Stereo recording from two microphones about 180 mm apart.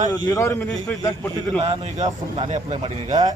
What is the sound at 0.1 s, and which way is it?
A man's voice, 15° left (ahead or behind).